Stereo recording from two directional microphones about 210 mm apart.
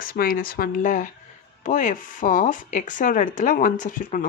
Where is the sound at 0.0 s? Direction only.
45° left (ahead or behind).